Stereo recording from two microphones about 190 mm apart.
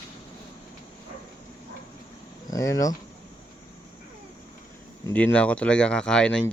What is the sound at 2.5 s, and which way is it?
Speech, 20° left (ahead or behind).